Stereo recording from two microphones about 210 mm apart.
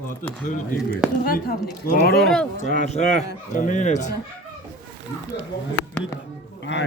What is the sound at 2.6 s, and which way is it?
Speech, 35° left (ahead or behind).